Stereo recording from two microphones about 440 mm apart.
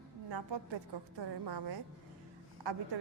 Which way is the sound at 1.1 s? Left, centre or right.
Right.